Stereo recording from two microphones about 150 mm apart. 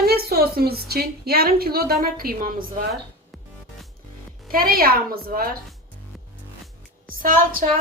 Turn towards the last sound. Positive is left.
turn(degrees=-65)  # may be behind; listen again after turning